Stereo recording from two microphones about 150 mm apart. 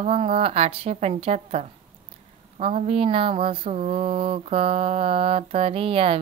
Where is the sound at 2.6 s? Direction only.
40° right (ahead or behind).